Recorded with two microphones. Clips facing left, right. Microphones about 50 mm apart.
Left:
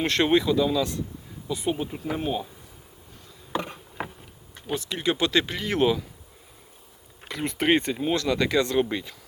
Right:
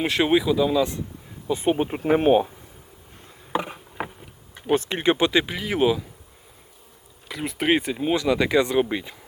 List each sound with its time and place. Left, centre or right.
0.0 s speech: centre
1.5 s speech: right
3.5 s insect: centre
4.7 s speech: right; by 6.1 s centre
7.3 s speech: centre